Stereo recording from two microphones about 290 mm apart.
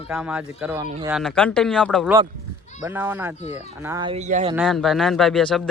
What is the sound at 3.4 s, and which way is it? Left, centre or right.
Speech, left.